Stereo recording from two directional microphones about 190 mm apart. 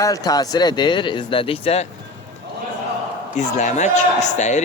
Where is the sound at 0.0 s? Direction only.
20° left (ahead or behind).